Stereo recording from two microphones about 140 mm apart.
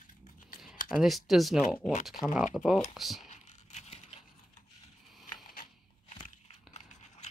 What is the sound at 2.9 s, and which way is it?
Speech, centre (ahead or behind).